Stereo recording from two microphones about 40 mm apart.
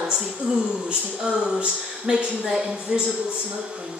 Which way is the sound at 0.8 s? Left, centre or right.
Right.